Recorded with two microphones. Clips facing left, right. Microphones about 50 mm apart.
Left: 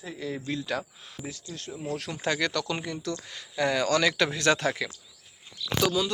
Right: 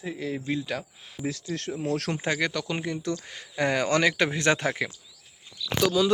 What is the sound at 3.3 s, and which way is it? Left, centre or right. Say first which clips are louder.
Speech: even; right.